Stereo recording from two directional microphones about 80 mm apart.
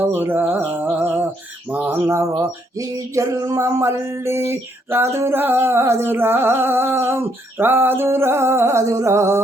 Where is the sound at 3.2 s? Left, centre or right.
Right.